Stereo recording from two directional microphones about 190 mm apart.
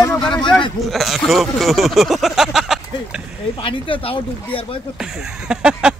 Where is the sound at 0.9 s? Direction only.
Centre (ahead or behind).